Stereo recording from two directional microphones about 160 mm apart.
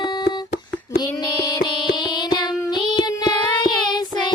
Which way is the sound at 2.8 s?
25° left (ahead or behind).